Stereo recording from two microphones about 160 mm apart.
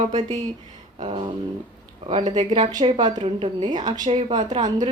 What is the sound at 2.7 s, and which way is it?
A woman's voice, 25° right (ahead or behind).